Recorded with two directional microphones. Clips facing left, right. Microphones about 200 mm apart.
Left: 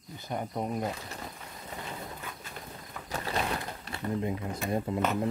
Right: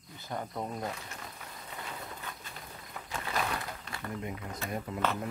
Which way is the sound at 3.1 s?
35° left (ahead or behind).